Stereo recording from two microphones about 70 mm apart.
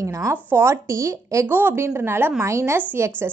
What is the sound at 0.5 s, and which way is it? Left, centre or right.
A woman's voice, right.